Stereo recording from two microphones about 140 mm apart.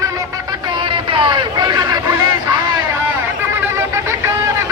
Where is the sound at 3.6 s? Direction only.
20° right (ahead or behind).